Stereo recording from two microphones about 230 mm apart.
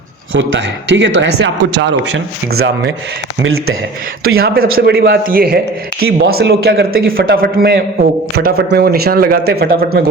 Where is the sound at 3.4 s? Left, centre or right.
Right.